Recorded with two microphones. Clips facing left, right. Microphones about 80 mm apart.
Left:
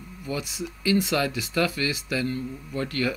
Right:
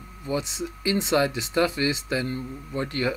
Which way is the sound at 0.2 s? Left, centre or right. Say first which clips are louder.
Right 3 dB; right.